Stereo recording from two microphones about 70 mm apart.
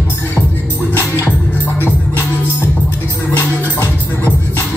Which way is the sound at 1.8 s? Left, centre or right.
Left.